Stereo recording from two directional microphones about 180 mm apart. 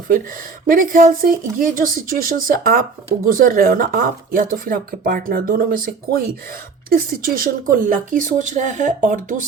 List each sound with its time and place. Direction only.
0.7 s speech: 50° right (ahead or behind)